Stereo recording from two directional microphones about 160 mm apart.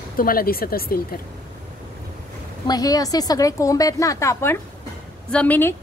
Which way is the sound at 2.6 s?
25° left (ahead or behind).